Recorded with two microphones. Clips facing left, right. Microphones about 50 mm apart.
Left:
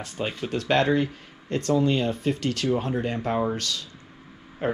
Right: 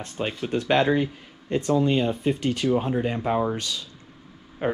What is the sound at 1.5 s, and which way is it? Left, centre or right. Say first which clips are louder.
Speech: right 1 dB; centre.